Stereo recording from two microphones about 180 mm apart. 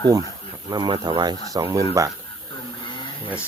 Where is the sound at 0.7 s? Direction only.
25° right (ahead or behind).